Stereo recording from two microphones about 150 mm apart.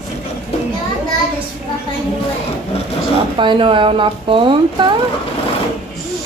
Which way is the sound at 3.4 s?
35° right (ahead or behind).